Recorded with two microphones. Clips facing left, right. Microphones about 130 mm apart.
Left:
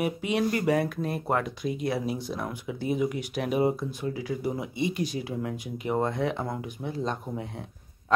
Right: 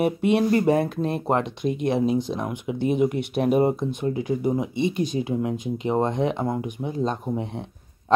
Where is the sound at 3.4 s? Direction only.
50° right (ahead or behind).